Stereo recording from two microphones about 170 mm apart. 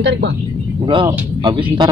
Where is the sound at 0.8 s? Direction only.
25° right (ahead or behind).